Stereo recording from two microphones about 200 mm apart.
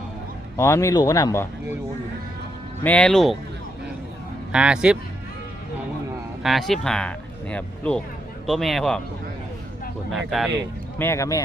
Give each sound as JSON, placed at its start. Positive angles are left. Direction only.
{"t": 0.5, "sound": "speech", "side_deg": 15}
{"t": 2.8, "sound": "speech", "side_deg": 5}
{"t": 4.5, "sound": "speech", "side_deg": -5}
{"t": 6.4, "sound": "speech", "side_deg": 0}
{"t": 10.1, "sound": "speech", "side_deg": 0}
{"t": 10.9, "sound": "speech", "side_deg": 10}